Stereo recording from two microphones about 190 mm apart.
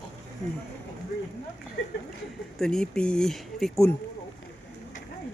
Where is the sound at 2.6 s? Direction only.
5° left (ahead or behind).